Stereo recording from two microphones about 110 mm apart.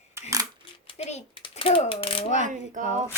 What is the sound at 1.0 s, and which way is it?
Speech, 80° left.